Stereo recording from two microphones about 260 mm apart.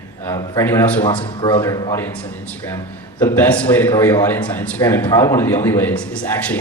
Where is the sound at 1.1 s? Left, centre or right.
Centre.